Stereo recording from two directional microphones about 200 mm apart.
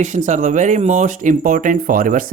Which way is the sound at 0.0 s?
35° right (ahead or behind).